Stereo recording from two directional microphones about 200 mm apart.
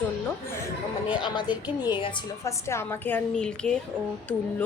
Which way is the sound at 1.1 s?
25° left (ahead or behind).